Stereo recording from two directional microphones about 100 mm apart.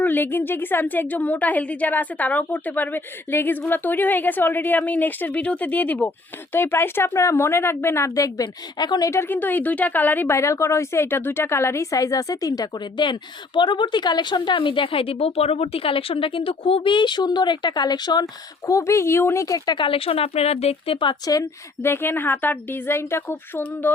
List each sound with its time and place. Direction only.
0.0 s a woman's voice: 20° left (ahead or behind); by 9.0 s 40° left (ahead or behind)
9.0 s speech: 25° left (ahead or behind)
13.1 s a woman's voice: 50° left (ahead or behind)
18.6 s a woman's voice: 30° left (ahead or behind); by 21.2 s 60° left (ahead or behind)
21.8 s speech: 25° left (ahead or behind)